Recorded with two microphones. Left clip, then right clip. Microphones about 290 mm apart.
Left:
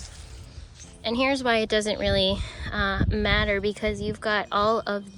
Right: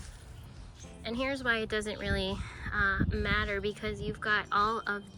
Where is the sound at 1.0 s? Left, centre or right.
Centre.